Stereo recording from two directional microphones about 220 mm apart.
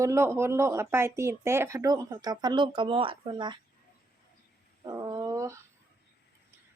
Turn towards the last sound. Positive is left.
turn(degrees=-15)  # may be behind; listen again after turning